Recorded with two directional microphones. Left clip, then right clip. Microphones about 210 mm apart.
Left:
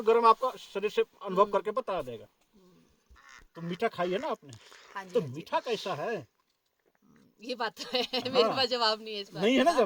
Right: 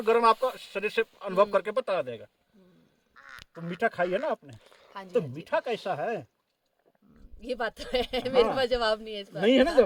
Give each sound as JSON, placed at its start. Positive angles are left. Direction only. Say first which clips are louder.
{"t": 0.0, "sound": "speech", "louder": "right 1 dB", "side_deg": 5}
{"t": 3.2, "sound": "duck", "louder": "right 6 dB", "side_deg": 50}
{"t": 3.6, "sound": "speech", "louder": "right 3 dB", "side_deg": 5}
{"t": 4.5, "sound": "speech", "louder": "left 1 dB", "side_deg": -5}
{"t": 7.3, "sound": "speech", "louder": "right 2 dB", "side_deg": -20}
{"t": 9.4, "sound": "speech", "louder": "right 4 dB", "side_deg": 35}